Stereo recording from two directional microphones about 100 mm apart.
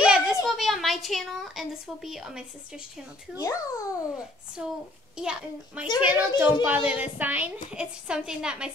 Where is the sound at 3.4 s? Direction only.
35° left (ahead or behind).